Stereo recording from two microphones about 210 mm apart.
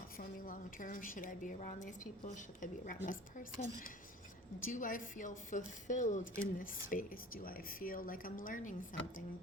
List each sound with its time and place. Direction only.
0.2 s a woman's voice: 40° left (ahead or behind)